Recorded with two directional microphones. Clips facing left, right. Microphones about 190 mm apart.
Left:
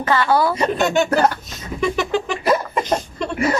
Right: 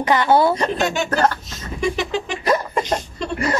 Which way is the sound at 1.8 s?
55° left (ahead or behind).